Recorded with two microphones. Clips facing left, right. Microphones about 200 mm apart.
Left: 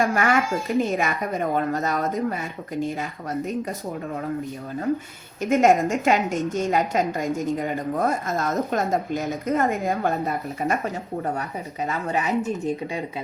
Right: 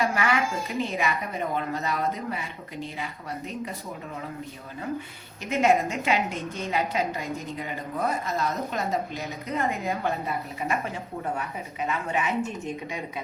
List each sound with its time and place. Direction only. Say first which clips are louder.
0.0 s a woman's voice: left 4 dB; 45° left (ahead or behind)
5.4 s a woman's voice: left 5 dB; 45° left (ahead or behind)